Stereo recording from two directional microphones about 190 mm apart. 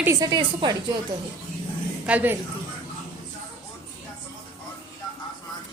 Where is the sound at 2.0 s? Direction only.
10° right (ahead or behind).